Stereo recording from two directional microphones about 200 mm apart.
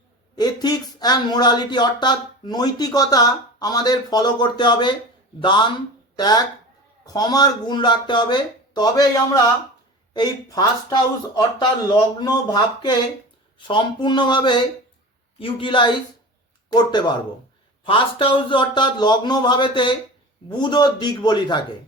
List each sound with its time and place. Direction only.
0.3 s speech: 20° left (ahead or behind)
12.2 s speech: 20° left (ahead or behind)